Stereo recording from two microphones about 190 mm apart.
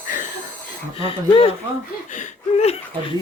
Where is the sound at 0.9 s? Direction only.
30° left (ahead or behind).